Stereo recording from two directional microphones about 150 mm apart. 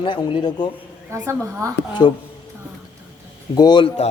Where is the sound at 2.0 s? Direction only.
25° left (ahead or behind).